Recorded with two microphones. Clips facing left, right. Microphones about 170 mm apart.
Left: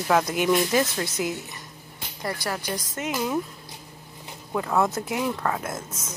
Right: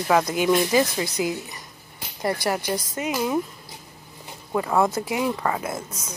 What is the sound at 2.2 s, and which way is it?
Speech, 20° right (ahead or behind).